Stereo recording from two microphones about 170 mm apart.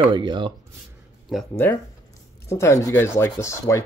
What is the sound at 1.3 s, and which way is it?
Speech, centre (ahead or behind).